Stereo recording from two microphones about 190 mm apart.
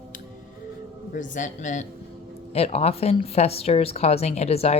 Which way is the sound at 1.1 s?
40° left (ahead or behind).